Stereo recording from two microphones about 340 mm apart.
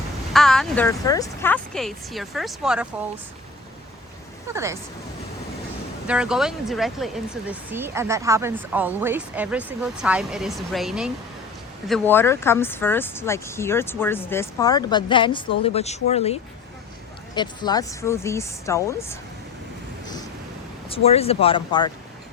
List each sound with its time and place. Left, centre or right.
0.3 s speech: centre
4.5 s speech: centre
6.1 s speech: centre
20.9 s speech: centre